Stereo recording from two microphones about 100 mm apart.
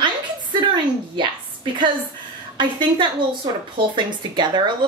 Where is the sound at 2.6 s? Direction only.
55° right (ahead or behind).